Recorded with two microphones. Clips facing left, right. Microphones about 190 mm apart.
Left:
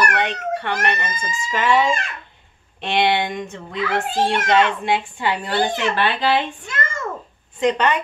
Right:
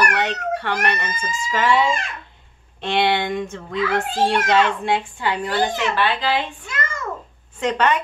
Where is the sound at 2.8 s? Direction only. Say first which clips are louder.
Even; 20° left (ahead or behind).